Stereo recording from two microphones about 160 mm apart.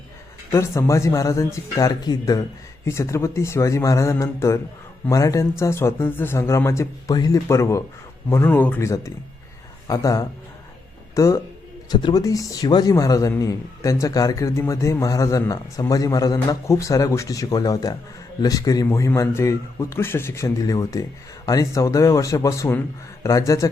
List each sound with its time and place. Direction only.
0.5 s a man's voice: 15° left (ahead or behind)